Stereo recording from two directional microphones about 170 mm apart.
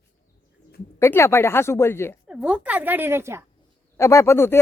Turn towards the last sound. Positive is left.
turn(degrees=15)  # may be behind; listen again after turning